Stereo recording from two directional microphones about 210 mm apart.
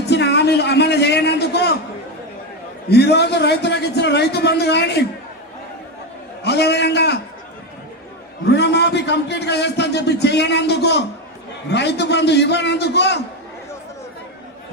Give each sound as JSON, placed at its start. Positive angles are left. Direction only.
{"t": 0.0, "sound": "a sound", "side_deg": 55}
{"t": 2.9, "sound": "a man's voice", "side_deg": 55}
{"t": 6.4, "sound": "a man's voice", "side_deg": 50}
{"t": 8.4, "sound": "a man's voice", "side_deg": 55}